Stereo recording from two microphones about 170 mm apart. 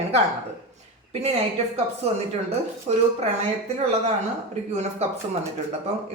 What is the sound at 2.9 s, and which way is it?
Speech, 40° right (ahead or behind).